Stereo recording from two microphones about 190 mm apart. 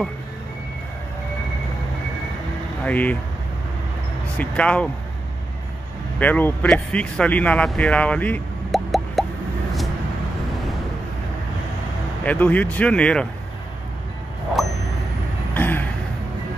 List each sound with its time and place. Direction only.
2.8 s speech: 10° left (ahead or behind)
4.4 s speech: 5° left (ahead or behind)
6.1 s speech: 10° left (ahead or behind)
12.3 s speech: 10° left (ahead or behind)
15.5 s a sound: 10° left (ahead or behind)